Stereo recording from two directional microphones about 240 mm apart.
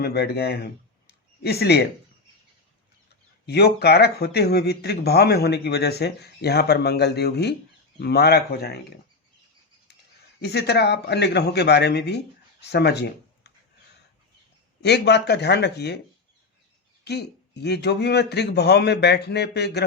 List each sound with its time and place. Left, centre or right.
0.0 s speech: left
3.4 s speech: left
10.4 s speech: left
14.8 s speech: left
17.0 s speech: left